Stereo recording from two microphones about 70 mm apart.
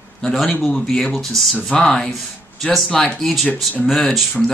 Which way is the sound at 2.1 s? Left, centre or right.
Centre.